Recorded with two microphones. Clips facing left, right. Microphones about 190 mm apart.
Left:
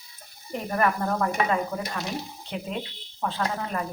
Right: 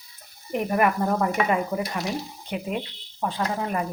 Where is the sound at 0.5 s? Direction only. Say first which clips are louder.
Right 3 dB; 15° right (ahead or behind).